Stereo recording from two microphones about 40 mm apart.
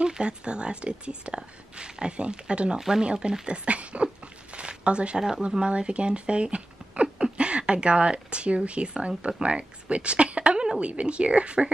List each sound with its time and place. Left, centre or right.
0.0 s speech: right
4.6 s a sound: right
5.5 s speech: right